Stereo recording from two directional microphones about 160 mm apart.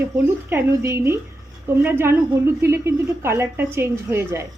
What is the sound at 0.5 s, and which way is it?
Speech, 15° right (ahead or behind).